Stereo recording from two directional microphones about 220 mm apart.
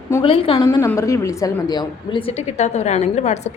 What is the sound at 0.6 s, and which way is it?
A woman's voice, 15° left (ahead or behind).